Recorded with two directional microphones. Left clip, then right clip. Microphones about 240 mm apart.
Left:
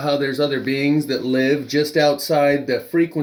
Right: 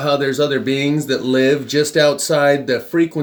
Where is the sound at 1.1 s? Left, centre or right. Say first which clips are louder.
Right 4 dB; right.